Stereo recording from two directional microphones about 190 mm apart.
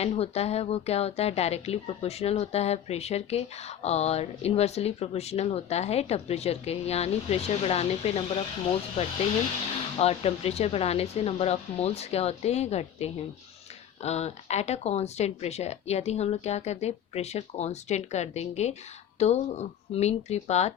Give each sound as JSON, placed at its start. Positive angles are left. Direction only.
{"t": 0.0, "sound": "speech", "side_deg": 35}
{"t": 10.0, "sound": "speech", "side_deg": 35}